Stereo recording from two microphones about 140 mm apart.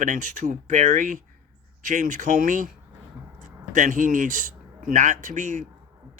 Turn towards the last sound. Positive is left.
turn(degrees=-65)  # may be behind; listen again after turning